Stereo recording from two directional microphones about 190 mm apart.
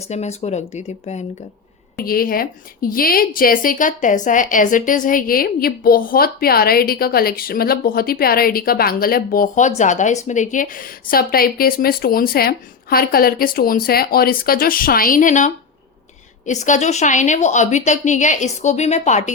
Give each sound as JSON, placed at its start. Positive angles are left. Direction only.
{"t": 0.1, "sound": "a woman's voice", "side_deg": 35}
{"t": 2.0, "sound": "a woman's voice", "side_deg": 50}